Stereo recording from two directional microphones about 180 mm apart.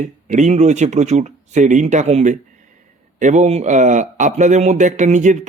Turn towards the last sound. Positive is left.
turn(degrees=-40)  # may be behind; listen again after turning